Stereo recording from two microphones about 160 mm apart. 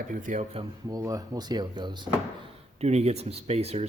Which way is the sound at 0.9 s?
20° right (ahead or behind).